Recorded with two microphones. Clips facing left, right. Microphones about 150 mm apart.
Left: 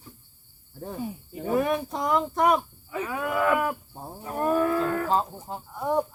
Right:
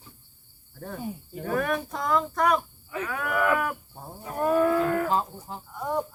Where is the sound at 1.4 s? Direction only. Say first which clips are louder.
Left 3 dB; 15° left (ahead or behind).